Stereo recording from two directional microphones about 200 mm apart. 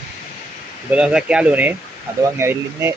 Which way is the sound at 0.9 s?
5° right (ahead or behind).